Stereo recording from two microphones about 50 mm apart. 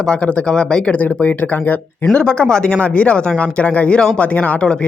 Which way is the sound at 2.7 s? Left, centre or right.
Left.